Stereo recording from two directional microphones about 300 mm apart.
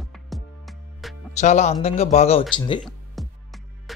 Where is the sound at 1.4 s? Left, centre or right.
Left.